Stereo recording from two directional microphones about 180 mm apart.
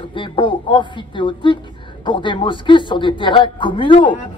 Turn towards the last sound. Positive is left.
turn(degrees=25)  # may be behind; listen again after turning